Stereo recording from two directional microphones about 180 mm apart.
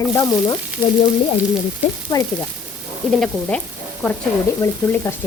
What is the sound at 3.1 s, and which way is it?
Speech, centre (ahead or behind).